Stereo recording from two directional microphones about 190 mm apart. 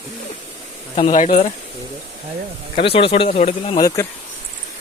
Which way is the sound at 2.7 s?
30° left (ahead or behind).